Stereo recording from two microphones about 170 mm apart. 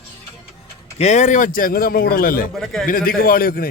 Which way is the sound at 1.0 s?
45° left (ahead or behind).